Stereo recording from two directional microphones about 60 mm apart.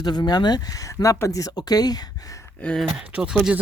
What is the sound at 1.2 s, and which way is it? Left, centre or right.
Speech, left.